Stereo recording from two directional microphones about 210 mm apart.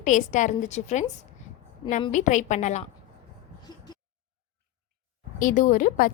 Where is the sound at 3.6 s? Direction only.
20° left (ahead or behind).